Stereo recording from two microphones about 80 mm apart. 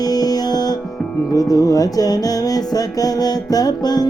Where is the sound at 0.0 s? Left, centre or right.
Left.